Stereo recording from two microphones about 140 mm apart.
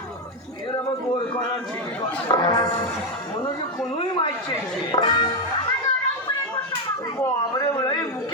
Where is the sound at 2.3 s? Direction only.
30° left (ahead or behind).